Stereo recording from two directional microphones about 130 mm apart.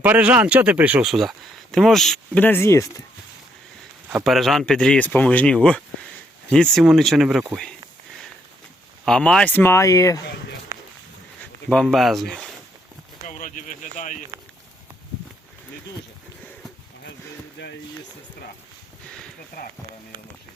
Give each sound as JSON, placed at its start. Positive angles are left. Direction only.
{"t": 0.0, "sound": "speech", "side_deg": -10}
{"t": 4.2, "sound": "speech", "side_deg": 0}
{"t": 10.7, "sound": "a sound", "side_deg": -25}
{"t": 11.7, "sound": "speech", "side_deg": 0}
{"t": 13.2, "sound": "speech", "side_deg": 80}